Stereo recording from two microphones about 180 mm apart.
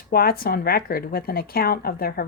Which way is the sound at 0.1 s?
55° left (ahead or behind).